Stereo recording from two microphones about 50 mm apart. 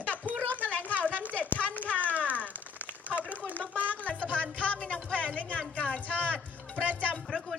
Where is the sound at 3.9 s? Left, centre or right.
Left.